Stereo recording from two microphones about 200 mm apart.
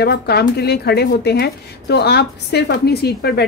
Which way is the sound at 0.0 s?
55° left (ahead or behind).